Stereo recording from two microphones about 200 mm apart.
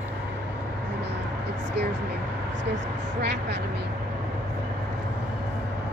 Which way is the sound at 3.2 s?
60° right (ahead or behind).